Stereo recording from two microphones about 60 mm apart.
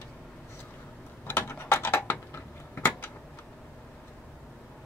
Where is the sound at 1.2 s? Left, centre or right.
Left.